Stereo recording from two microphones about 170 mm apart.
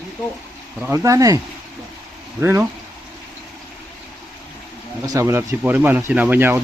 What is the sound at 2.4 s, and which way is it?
Speech, 15° right (ahead or behind).